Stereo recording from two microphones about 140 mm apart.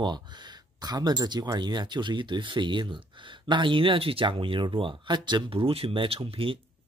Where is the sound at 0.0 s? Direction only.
30° right (ahead or behind).